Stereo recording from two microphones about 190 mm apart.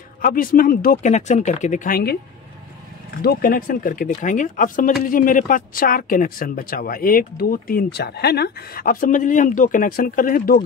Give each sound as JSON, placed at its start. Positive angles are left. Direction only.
{"t": 0.2, "sound": "speech", "side_deg": 45}
{"t": 3.2, "sound": "speech", "side_deg": 50}